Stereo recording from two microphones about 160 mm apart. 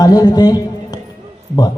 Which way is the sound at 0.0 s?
25° left (ahead or behind).